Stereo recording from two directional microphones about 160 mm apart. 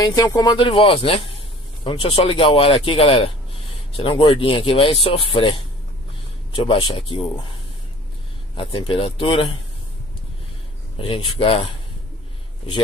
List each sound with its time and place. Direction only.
0.1 s speech: 25° left (ahead or behind)
8.5 s speech: 35° left (ahead or behind)
11.0 s speech: 35° left (ahead or behind)